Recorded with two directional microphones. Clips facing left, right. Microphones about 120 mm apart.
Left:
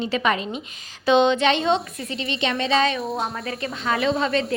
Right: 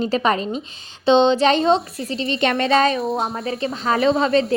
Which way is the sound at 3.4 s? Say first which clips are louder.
Right 4 dB; 30° right (ahead or behind).